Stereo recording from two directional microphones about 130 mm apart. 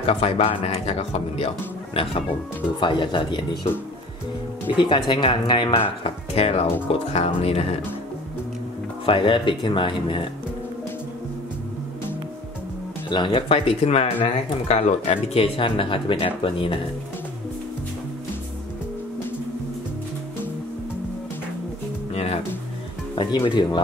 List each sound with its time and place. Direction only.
0.0 s speech: 50° left (ahead or behind)
2.8 s speech: 35° left (ahead or behind)
4.7 s speech: 40° left (ahead or behind)
9.0 s speech: 40° left (ahead or behind)
13.1 s speech: 40° left (ahead or behind)
22.1 s music: 50° left (ahead or behind)
23.1 s speech: 40° left (ahead or behind)